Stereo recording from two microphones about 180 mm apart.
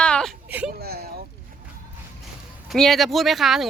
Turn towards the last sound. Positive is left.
turn(degrees=0)  # may be behind; listen again after turning